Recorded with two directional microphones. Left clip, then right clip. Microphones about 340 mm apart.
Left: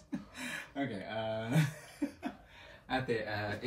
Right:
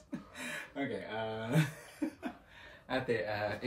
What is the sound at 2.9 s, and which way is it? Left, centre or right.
Speech, centre.